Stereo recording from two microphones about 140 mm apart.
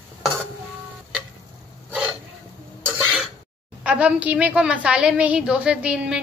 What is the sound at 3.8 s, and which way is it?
A woman's voice, 10° right (ahead or behind).